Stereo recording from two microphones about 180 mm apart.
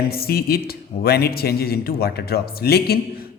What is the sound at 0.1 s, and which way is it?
A man's voice, 60° left (ahead or behind).